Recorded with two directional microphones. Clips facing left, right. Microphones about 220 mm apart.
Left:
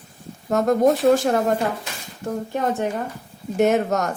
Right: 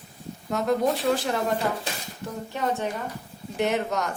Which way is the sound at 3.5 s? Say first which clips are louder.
Left 7 dB; 45° left (ahead or behind).